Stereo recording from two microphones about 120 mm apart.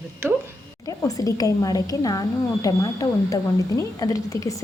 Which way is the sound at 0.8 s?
30° left (ahead or behind).